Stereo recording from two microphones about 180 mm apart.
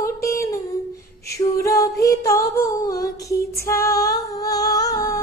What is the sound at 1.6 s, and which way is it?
Humming, 20° left (ahead or behind).